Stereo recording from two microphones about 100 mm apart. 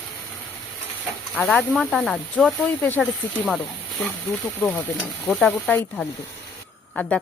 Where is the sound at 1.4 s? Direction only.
5° left (ahead or behind).